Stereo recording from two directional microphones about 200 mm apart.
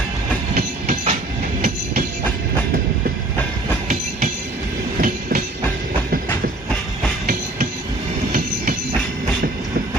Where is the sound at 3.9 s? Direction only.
40° right (ahead or behind).